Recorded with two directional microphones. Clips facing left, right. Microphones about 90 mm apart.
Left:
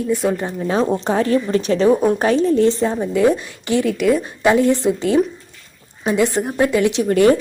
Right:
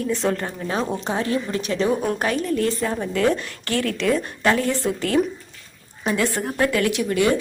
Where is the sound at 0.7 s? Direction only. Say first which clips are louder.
Left 7 dB; 30° left (ahead or behind).